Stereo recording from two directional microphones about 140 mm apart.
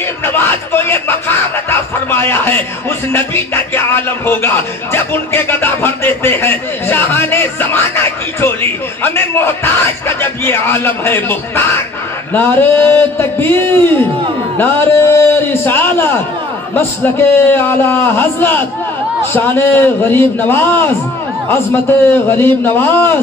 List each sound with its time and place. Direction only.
0.2 s a sound: 15° left (ahead or behind)
3.1 s speech: 15° left (ahead or behind)
22.0 s speech: 15° left (ahead or behind)